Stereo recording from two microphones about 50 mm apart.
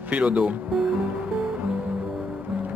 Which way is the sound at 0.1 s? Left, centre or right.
Right.